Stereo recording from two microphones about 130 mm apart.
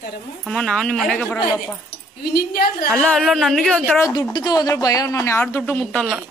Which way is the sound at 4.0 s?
30° left (ahead or behind).